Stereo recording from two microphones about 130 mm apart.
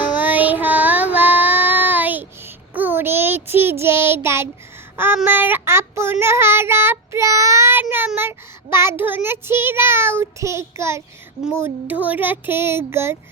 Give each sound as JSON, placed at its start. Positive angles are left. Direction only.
{"t": 0.2, "sound": "child singing", "side_deg": -15}
{"t": 11.5, "sound": "speech", "side_deg": -15}